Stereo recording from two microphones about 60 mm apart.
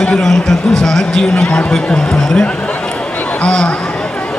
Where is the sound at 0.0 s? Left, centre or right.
Centre.